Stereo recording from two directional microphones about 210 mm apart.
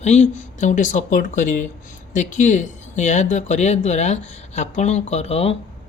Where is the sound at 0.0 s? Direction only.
35° left (ahead or behind).